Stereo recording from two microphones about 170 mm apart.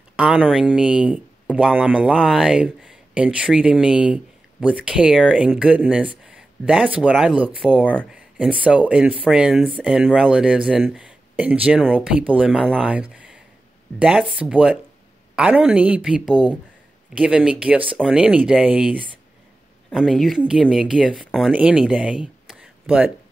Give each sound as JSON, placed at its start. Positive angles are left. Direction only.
{"t": 0.1, "sound": "speech", "side_deg": -5}
{"t": 7.8, "sound": "speech", "side_deg": 5}
{"t": 8.1, "sound": "a woman's voice", "side_deg": -5}